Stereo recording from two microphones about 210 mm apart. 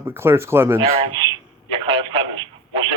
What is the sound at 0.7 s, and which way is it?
Speech, 25° right (ahead or behind).